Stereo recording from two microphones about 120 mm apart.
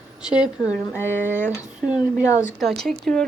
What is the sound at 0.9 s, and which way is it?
Speech, 20° left (ahead or behind).